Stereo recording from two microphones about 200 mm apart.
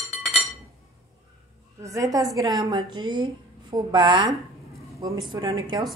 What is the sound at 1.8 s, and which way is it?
A woman's voice, 15° right (ahead or behind).